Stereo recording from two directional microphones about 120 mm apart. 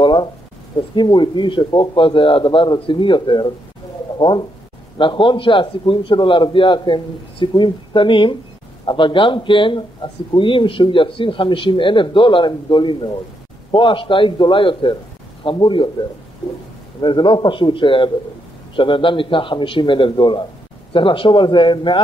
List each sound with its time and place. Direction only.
0.0 s a sound: 40° left (ahead or behind)
0.9 s a man's voice: 40° left (ahead or behind)
17.0 s a man's voice: 40° left (ahead or behind)